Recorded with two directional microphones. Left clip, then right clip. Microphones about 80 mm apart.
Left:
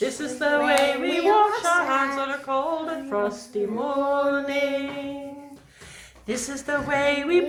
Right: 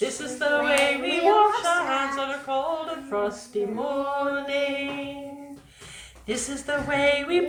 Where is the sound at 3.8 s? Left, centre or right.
Left.